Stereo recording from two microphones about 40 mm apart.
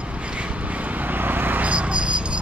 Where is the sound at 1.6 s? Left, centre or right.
Right.